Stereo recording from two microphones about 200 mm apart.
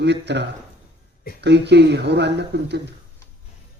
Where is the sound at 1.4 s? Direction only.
60° right (ahead or behind).